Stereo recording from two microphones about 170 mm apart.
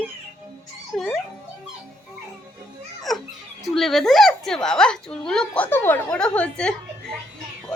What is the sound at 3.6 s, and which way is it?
A woman's voice, centre (ahead or behind).